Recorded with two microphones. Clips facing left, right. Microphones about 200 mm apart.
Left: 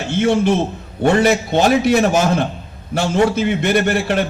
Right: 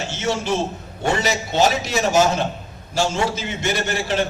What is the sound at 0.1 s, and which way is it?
A man's voice, 55° left (ahead or behind).